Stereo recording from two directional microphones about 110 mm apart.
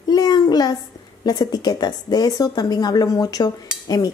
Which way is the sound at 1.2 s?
35° left (ahead or behind).